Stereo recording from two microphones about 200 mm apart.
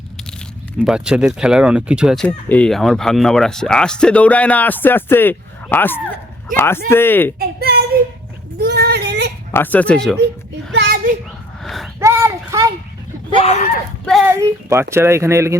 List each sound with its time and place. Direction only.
0.8 s speech: 5° right (ahead or behind)
2.2 s speech: 5° left (ahead or behind)
7.3 s a sound: 50° right (ahead or behind)
9.5 s speech: 10° left (ahead or behind)
10.7 s children playing: 60° right (ahead or behind)
11.6 s a sound: centre (ahead or behind)
11.9 s a sound: 15° right (ahead or behind)
13.3 s speech: 30° left (ahead or behind)
14.0 s speech: centre (ahead or behind)
14.3 s a child's voice: 10° right (ahead or behind)